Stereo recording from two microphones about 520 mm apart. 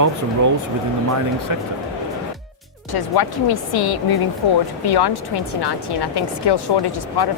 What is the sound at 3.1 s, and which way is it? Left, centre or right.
Speech, left.